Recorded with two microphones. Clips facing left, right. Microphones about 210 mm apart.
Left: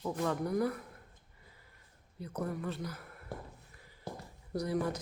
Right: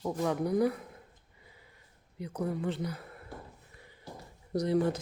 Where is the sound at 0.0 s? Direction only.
15° right (ahead or behind).